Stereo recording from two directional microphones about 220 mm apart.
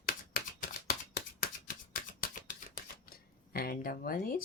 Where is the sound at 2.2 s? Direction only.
40° left (ahead or behind).